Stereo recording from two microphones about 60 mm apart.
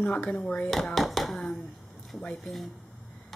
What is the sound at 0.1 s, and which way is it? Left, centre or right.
Speech, centre.